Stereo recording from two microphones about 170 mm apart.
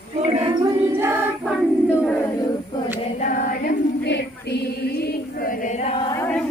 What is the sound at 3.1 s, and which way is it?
Female singing, 50° left (ahead or behind).